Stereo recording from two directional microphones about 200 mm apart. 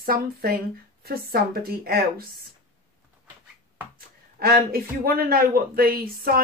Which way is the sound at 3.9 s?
50° right (ahead or behind).